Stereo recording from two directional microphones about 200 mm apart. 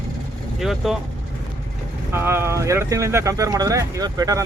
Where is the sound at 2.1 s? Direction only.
10° right (ahead or behind).